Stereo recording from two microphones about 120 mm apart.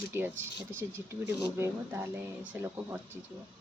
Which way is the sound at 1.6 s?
20° right (ahead or behind).